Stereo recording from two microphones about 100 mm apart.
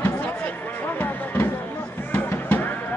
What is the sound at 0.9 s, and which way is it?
Music, 20° left (ahead or behind).